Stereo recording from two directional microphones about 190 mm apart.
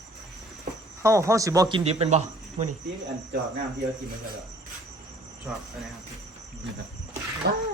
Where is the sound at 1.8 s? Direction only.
30° right (ahead or behind).